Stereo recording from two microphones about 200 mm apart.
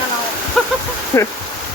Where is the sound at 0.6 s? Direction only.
5° left (ahead or behind).